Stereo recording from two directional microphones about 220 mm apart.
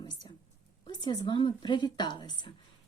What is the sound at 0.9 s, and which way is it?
A woman's voice, 20° left (ahead or behind).